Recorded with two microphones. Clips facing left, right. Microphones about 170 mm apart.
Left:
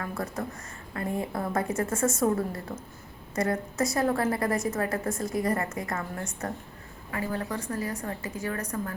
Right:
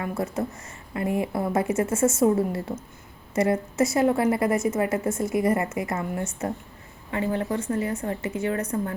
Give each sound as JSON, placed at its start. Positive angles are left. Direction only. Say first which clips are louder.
{"t": 0.0, "sound": "a woman's voice", "louder": "right 5 dB", "side_deg": -25}